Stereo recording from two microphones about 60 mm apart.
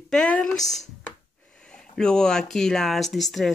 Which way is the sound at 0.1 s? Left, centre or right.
Centre.